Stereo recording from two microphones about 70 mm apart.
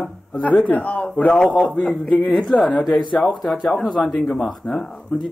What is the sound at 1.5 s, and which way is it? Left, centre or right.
Speech, centre.